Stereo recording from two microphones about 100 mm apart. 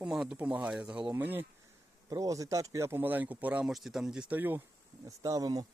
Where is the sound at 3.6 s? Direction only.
5° right (ahead or behind).